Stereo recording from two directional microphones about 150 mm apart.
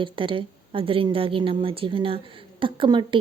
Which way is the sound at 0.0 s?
35° right (ahead or behind).